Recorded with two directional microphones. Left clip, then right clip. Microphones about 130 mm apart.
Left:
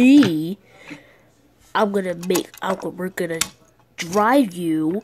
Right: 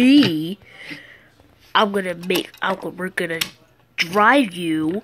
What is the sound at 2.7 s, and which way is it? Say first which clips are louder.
Speech: even; 15° left (ahead or behind).